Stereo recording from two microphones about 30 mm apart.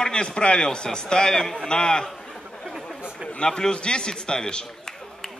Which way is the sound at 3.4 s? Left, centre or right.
Left.